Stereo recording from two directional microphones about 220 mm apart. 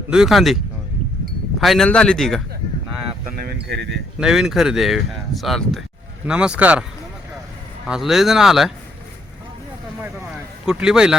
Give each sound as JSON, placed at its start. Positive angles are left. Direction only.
{"t": 0.1, "sound": "speech", "side_deg": 0}
{"t": 3.4, "sound": "a sound", "side_deg": -50}
{"t": 4.2, "sound": "speech", "side_deg": 0}
{"t": 7.9, "sound": "speech", "side_deg": 0}
{"t": 10.7, "sound": "speech", "side_deg": -5}